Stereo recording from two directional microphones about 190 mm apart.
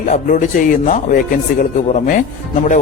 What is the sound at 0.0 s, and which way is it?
Speech, 40° left (ahead or behind).